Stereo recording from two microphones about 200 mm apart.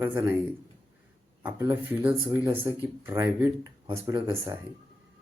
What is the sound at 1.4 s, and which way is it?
Speech, 10° right (ahead or behind).